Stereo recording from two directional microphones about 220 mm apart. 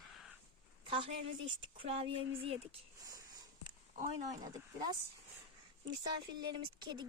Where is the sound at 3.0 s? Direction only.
15° right (ahead or behind).